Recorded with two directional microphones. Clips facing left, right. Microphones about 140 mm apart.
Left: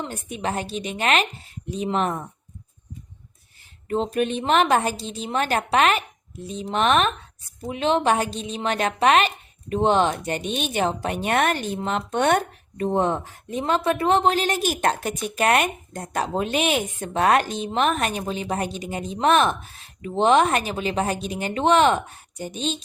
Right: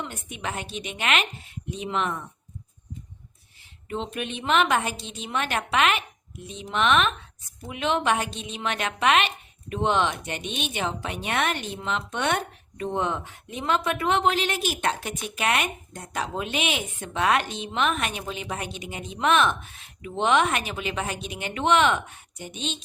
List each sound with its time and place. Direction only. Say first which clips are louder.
0.0 s a woman's voice: left 5 dB; 35° left (ahead or behind)
3.8 s a woman's voice: left 8 dB; 40° left (ahead or behind)